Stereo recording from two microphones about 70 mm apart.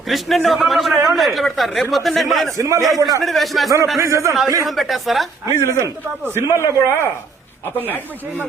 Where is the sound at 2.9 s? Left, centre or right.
Right.